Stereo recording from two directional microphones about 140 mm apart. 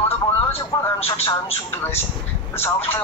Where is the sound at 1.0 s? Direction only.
45° left (ahead or behind).